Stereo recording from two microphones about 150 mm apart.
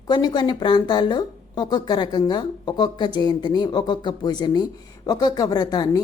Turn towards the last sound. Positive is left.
turn(degrees=25)  # may be behind; listen again after turning